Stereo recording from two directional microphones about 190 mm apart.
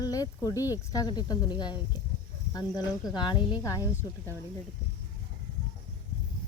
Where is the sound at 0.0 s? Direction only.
20° left (ahead or behind).